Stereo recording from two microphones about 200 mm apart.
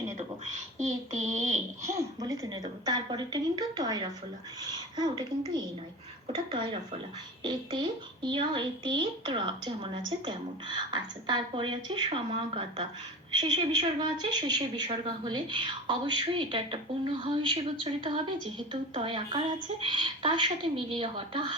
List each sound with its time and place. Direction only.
0.8 s child singing: 35° right (ahead or behind)
2.1 s a woman's voice: 20° right (ahead or behind)
6.2 s a woman's voice: 20° right (ahead or behind)